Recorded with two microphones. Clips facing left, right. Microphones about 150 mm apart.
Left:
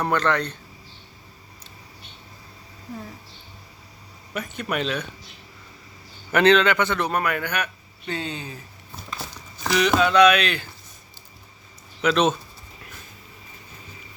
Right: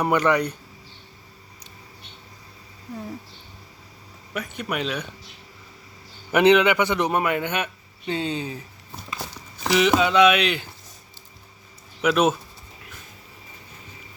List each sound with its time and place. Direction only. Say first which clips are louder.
0.0 s speech: right 2 dB; 10° right (ahead or behind)
4.4 s speech: left 1 dB; 10° right (ahead or behind)
6.3 s a man's voice: right 1 dB; 15° right (ahead or behind)
9.6 s a man's voice: right 1 dB; 20° right (ahead or behind)
12.0 s speech: right 1 dB; 10° right (ahead or behind)